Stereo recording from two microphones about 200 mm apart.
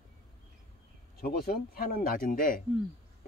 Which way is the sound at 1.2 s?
45° left (ahead or behind).